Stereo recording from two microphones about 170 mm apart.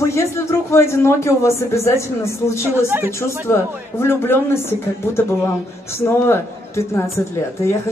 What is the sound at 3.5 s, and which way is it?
Speech, 15° left (ahead or behind).